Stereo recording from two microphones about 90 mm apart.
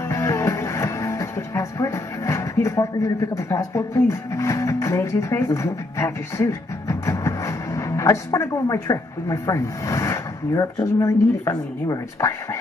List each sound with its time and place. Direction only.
0.1 s music: 35° left (ahead or behind)
10.8 s a woman's voice: 35° left (ahead or behind)